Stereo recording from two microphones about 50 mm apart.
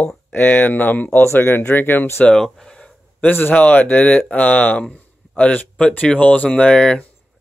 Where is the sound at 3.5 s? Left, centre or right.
Left.